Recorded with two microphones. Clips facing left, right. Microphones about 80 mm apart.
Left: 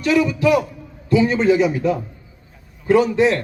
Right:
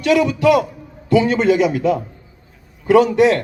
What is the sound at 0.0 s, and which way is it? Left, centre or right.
A man's voice, right.